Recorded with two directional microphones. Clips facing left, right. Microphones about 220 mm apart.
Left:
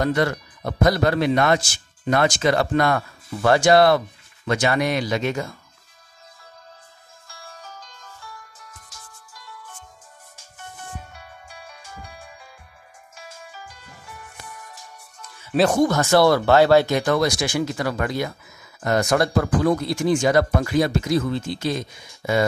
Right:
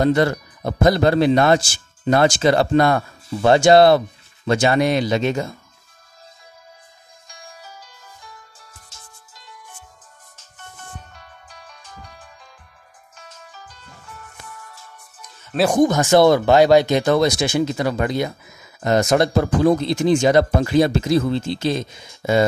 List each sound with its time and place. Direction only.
0.0 s speech: 25° right (ahead or behind)
7.2 s music: 15° right (ahead or behind)
11.0 s music: 10° left (ahead or behind)
15.6 s speech: 15° right (ahead or behind)